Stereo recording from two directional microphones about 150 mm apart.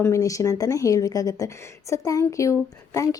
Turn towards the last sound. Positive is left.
turn(degrees=20)  # may be behind; listen again after turning